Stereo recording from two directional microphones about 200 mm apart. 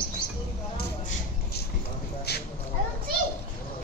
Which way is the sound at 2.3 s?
55° left (ahead or behind).